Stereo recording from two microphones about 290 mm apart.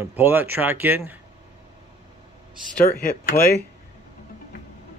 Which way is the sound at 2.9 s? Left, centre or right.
Left.